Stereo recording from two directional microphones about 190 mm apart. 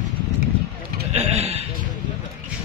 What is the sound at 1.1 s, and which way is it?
Speech, 35° right (ahead or behind).